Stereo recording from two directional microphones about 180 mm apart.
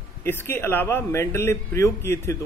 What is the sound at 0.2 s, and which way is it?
Speech, 10° left (ahead or behind).